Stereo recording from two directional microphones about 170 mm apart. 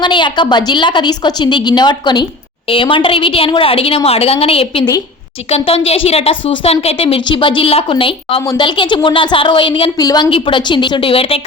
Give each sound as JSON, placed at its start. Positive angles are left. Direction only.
{"t": 0.0, "sound": "a woman's voice", "side_deg": 30}